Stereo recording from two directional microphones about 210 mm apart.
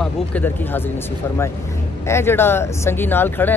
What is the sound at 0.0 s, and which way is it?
Speech, 10° left (ahead or behind).